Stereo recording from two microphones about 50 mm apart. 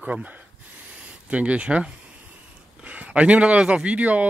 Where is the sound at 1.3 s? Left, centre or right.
Right.